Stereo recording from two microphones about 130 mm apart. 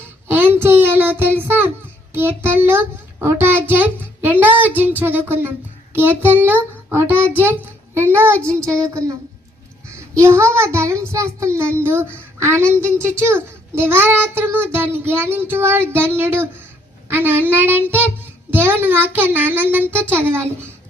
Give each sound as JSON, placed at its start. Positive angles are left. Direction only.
{"t": 0.3, "sound": "a sound", "side_deg": -15}
{"t": 2.1, "sound": "child singing", "side_deg": -15}
{"t": 8.8, "sound": "a child's voice", "side_deg": -25}
{"t": 17.1, "sound": "child singing", "side_deg": -15}